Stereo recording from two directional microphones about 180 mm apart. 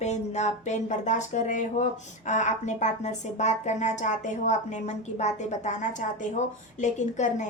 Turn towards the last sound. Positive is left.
turn(degrees=40)  # may be behind; listen again after turning